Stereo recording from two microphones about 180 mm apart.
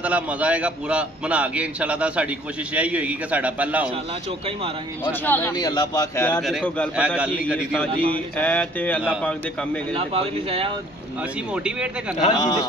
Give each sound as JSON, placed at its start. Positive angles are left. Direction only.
{"t": 0.0, "sound": "a man's voice", "side_deg": -5}
{"t": 5.0, "sound": "a sound", "side_deg": 10}
{"t": 5.6, "sound": "a man's voice", "side_deg": 20}
{"t": 6.4, "sound": "a man's voice", "side_deg": 5}
{"t": 8.1, "sound": "a sound", "side_deg": 5}
{"t": 9.2, "sound": "a man's voice", "side_deg": 5}
{"t": 9.9, "sound": "speech", "side_deg": -35}
{"t": 11.5, "sound": "a man's voice", "side_deg": -5}
{"t": 12.3, "sound": "a man's voice", "side_deg": 20}